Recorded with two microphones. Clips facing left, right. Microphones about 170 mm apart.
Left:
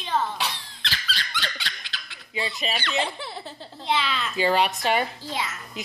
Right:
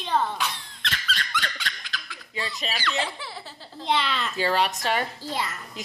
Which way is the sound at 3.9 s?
10° left (ahead or behind).